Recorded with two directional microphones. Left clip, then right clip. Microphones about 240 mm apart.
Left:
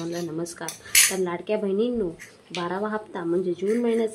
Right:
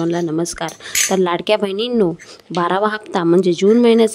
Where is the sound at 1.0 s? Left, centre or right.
Right.